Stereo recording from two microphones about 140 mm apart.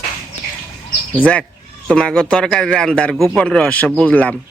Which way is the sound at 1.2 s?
10° left (ahead or behind).